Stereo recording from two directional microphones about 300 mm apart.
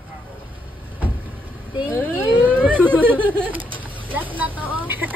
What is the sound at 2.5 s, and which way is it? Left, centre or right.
Whimper, centre.